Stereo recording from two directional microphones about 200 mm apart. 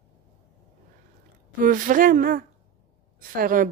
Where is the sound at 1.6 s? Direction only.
40° right (ahead or behind).